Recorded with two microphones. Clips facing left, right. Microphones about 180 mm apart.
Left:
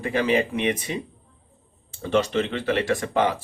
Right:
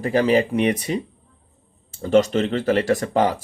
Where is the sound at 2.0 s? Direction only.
40° right (ahead or behind).